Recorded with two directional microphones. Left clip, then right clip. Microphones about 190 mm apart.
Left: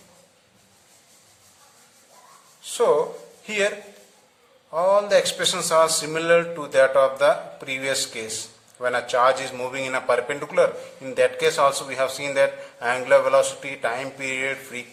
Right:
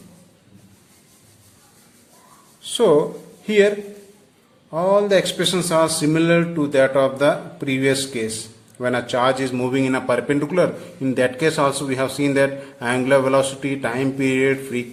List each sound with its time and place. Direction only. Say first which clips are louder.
2.7 s speech: right 4 dB; 15° right (ahead or behind)
4.7 s a man's voice: right 2 dB; 10° right (ahead or behind)